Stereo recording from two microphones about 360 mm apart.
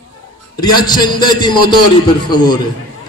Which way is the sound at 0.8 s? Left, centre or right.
Centre.